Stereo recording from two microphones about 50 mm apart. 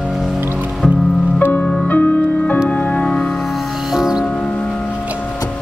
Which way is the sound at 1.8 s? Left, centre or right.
Left.